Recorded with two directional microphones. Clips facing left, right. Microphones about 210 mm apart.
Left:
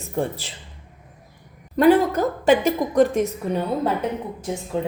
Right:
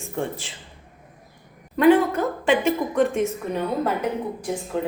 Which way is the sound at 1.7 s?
40° left (ahead or behind).